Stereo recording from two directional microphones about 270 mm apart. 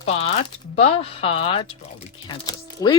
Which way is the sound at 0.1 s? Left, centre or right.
Left.